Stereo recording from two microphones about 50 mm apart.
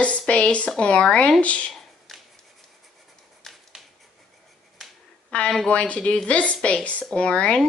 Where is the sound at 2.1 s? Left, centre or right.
Centre.